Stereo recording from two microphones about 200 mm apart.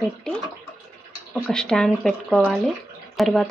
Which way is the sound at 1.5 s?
5° left (ahead or behind).